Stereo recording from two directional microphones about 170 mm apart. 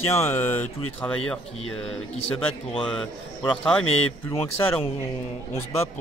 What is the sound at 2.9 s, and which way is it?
Speech, 5° left (ahead or behind).